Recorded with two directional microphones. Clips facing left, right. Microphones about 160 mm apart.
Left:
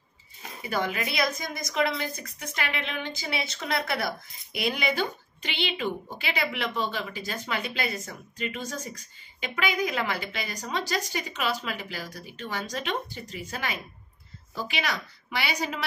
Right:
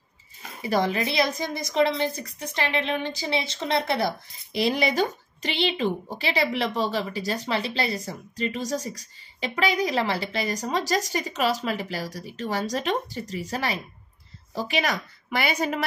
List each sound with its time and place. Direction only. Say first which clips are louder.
0.6 s a woman's voice: right 5 dB; 35° right (ahead or behind); by 15.8 s 50° right (ahead or behind)